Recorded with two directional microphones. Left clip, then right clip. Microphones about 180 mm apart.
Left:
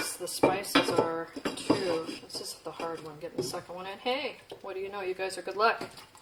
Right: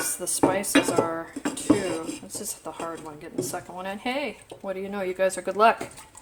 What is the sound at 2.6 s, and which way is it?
Speech, 50° right (ahead or behind).